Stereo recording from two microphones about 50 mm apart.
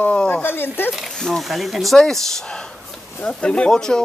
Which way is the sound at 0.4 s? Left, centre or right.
Left.